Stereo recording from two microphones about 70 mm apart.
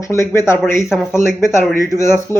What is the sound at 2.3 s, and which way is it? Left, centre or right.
Speech, left.